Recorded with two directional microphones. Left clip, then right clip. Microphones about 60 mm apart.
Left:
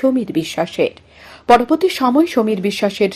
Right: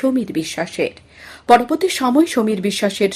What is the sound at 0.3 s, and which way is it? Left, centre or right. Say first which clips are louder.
Speech: left 3 dB; left.